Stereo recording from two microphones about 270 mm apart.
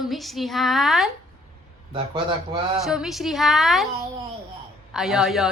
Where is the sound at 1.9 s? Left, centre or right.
Centre.